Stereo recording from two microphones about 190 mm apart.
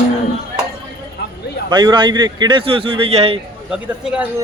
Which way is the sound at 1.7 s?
25° right (ahead or behind).